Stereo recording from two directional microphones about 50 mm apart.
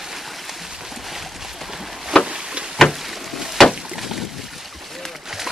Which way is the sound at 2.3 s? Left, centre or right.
Centre.